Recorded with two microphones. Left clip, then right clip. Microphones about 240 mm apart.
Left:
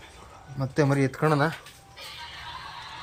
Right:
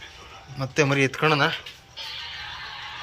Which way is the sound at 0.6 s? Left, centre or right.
Centre.